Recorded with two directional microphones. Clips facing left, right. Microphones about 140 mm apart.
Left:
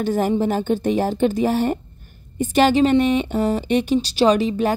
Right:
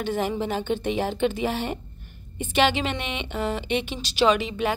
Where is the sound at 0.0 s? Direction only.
40° left (ahead or behind).